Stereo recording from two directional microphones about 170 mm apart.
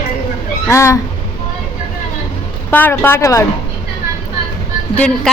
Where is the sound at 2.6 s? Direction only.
10° left (ahead or behind).